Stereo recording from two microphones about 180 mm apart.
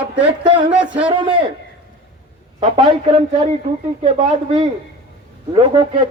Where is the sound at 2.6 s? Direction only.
30° right (ahead or behind).